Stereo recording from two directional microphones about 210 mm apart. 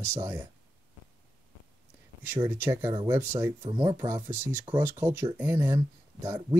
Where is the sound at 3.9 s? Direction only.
10° right (ahead or behind).